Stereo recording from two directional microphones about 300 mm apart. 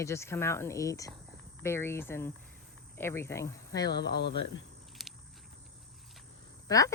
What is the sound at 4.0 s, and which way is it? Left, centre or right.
Speech, left.